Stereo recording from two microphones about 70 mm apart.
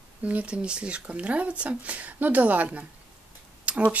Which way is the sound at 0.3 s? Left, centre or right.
Centre.